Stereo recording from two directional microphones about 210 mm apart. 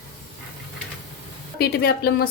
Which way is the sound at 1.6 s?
50° left (ahead or behind).